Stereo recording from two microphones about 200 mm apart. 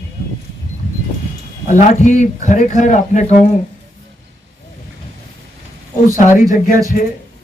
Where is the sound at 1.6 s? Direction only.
35° left (ahead or behind).